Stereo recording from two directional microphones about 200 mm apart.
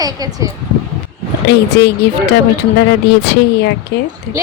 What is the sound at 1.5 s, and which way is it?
Speech, 55° left (ahead or behind).